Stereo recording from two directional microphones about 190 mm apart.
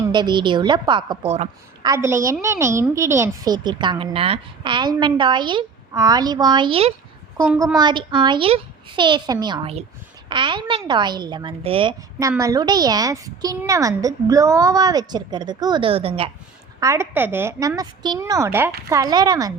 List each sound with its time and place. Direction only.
0.1 s a woman's voice: 25° right (ahead or behind)
2.0 s a woman's voice: 15° right (ahead or behind)
7.3 s a woman's voice: 15° right (ahead or behind); by 16.3 s 30° right (ahead or behind)
16.8 s a woman's voice: 15° right (ahead or behind)